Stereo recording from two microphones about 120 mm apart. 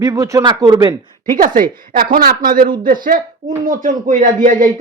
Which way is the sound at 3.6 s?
90° right.